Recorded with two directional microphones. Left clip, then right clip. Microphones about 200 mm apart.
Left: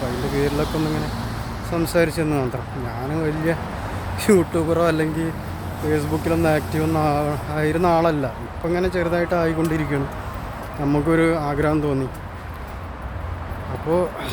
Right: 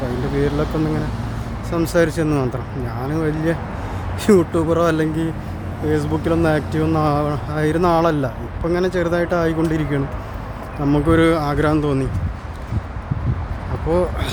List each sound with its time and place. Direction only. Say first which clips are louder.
0.4 s speech: right 2 dB; 60° left (ahead or behind)
1.7 s speech: right 2 dB; 10° right (ahead or behind)
10.8 s speech: right 3 dB; 5° right (ahead or behind)
13.9 s speech: right 2 dB; 5° right (ahead or behind)